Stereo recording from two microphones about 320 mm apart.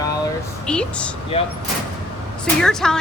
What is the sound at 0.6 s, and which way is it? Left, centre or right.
Speech, centre.